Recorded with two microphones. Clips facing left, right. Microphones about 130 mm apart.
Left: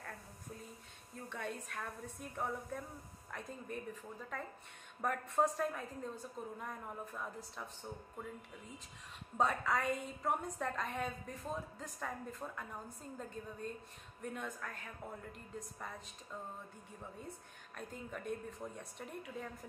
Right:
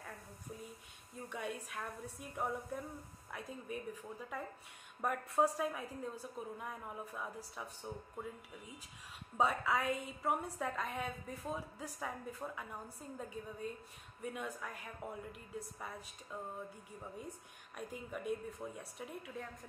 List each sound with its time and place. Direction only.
1.3 s a woman's voice: 10° right (ahead or behind)
9.4 s a woman's voice: 5° right (ahead or behind)